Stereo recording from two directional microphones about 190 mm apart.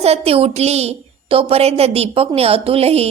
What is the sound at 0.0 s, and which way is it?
A woman's voice, 30° right (ahead or behind).